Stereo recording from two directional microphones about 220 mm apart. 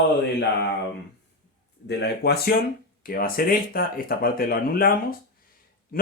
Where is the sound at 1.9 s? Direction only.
50° left (ahead or behind).